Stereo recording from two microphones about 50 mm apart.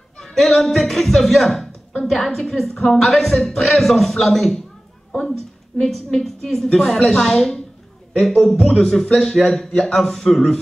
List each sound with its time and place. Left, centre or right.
0.2 s a man's voice: centre
5.8 s a woman's voice: centre